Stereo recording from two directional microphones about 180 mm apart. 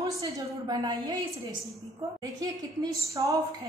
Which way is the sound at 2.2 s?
20° right (ahead or behind).